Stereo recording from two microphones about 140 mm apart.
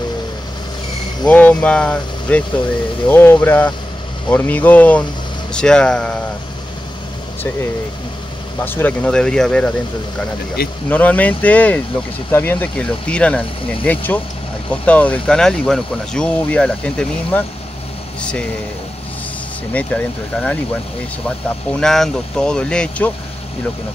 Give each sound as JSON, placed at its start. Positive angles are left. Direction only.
{"t": 1.2, "sound": "speech", "side_deg": 10}
{"t": 8.5, "sound": "speech", "side_deg": 15}
{"t": 10.9, "sound": "speech", "side_deg": 10}
{"t": 19.7, "sound": "speech", "side_deg": 10}
{"t": 21.7, "sound": "speech", "side_deg": 5}